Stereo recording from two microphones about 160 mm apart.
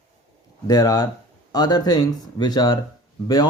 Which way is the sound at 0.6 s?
25° left (ahead or behind).